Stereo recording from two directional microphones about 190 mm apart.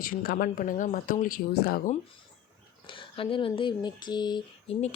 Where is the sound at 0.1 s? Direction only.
50° left (ahead or behind).